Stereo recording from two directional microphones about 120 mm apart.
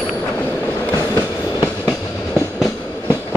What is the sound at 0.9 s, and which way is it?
Train, 30° left (ahead or behind).